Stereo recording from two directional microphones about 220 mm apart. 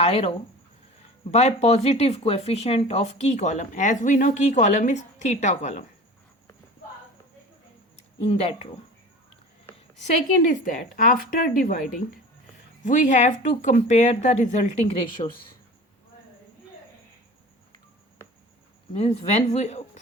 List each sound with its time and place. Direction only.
0.0 s speech: 25° left (ahead or behind)
8.2 s speech: 25° left (ahead or behind)
10.4 s speech: 35° left (ahead or behind)
12.8 s speech: 35° left (ahead or behind)
18.9 s speech: 30° left (ahead or behind)